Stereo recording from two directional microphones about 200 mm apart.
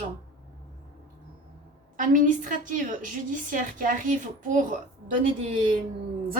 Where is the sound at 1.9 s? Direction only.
40° right (ahead or behind).